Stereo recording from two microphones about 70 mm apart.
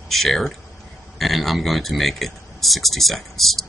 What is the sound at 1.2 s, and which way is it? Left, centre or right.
Speech, centre.